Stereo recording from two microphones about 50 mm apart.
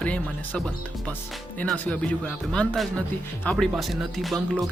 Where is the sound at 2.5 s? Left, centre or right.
Left.